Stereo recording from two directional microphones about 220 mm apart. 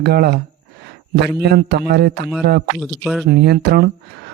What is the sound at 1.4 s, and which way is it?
Speech, 45° right (ahead or behind).